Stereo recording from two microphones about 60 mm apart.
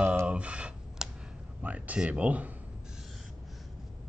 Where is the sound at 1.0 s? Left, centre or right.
Centre.